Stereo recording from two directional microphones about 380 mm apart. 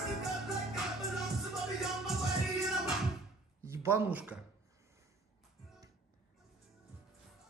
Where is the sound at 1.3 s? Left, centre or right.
Centre.